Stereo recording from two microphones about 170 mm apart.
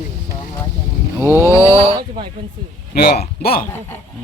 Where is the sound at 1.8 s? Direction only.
35° right (ahead or behind).